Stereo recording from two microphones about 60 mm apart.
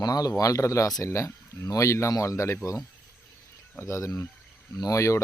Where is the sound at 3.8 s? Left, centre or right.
Left.